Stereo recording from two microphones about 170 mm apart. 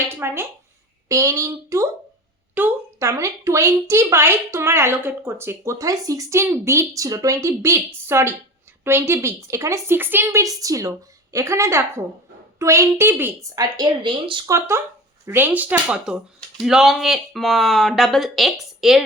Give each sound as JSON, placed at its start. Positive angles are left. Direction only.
{"t": 0.2, "sound": "a woman's voice", "side_deg": -15}
{"t": 13.7, "sound": "speech", "side_deg": -25}